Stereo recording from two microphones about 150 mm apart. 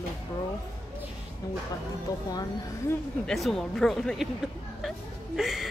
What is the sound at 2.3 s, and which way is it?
Speech, 25° left (ahead or behind).